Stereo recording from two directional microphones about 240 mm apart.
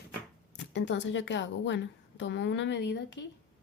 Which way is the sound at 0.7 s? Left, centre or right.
Left.